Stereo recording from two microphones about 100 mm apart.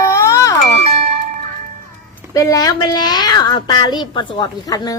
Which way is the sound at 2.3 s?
35° left (ahead or behind).